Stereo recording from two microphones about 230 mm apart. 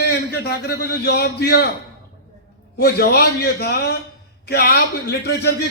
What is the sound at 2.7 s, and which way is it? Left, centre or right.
A man's voice, left.